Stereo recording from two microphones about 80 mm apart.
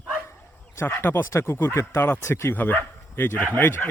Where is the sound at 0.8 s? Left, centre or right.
Left.